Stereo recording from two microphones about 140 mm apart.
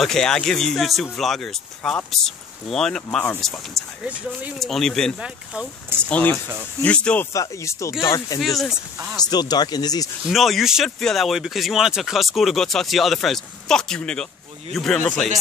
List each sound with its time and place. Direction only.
0.0 s speech: 5° left (ahead or behind)
5.2 s speech: 5° right (ahead or behind)
6.0 s speech: 10° left (ahead or behind)
7.3 s speech: 20° left (ahead or behind)
8.4 s speech: centre (ahead or behind)
9.2 s speech: 30° left (ahead or behind)
10.2 s speech: centre (ahead or behind)